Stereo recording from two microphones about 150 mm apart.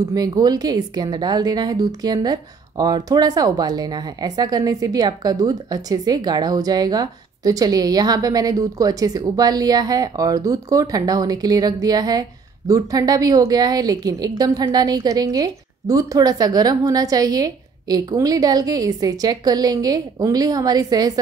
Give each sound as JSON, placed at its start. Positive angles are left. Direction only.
{"t": 0.1, "sound": "a woman's voice", "side_deg": -25}